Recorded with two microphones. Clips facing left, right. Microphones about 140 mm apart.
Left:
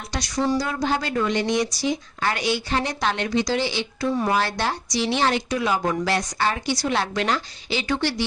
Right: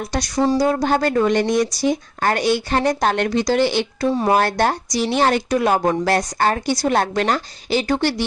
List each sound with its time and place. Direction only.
0.1 s speech: 50° right (ahead or behind)
4.1 s speech: 30° right (ahead or behind)
4.4 s speech: 50° right (ahead or behind)